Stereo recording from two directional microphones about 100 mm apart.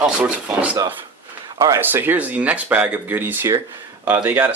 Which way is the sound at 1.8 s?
20° right (ahead or behind).